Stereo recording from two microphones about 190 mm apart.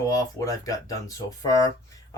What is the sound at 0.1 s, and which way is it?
Speech, 15° left (ahead or behind).